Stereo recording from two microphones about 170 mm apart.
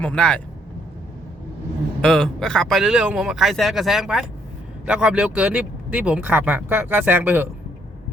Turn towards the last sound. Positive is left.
turn(degrees=-10)  # may be behind; listen again after turning